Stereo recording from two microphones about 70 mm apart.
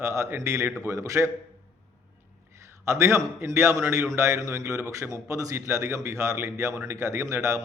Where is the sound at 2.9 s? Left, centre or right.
Right.